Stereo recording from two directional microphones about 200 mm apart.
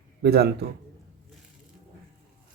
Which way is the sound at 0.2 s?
55° right (ahead or behind).